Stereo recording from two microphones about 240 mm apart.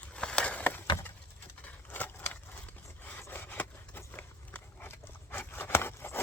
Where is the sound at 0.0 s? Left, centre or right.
Centre.